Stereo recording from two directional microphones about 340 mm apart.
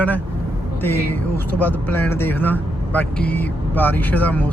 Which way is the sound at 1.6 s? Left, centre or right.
Centre.